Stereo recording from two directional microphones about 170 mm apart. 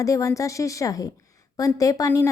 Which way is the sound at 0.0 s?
20° left (ahead or behind).